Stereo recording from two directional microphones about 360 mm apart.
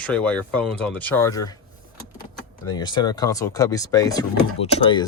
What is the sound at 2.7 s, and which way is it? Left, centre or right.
Speech, centre.